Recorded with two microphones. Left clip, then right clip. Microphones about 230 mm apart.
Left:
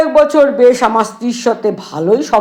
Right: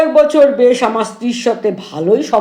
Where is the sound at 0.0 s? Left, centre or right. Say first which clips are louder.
Even; left.